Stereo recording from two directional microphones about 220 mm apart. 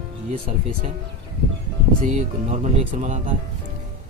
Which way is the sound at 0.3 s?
25° right (ahead or behind).